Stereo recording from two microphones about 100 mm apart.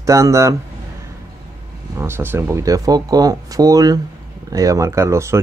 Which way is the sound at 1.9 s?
25° right (ahead or behind).